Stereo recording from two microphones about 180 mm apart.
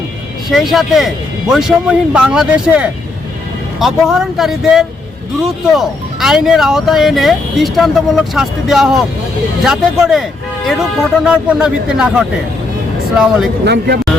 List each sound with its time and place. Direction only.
0.5 s speech: centre (ahead or behind)
13.7 s speech: 65° right (ahead or behind)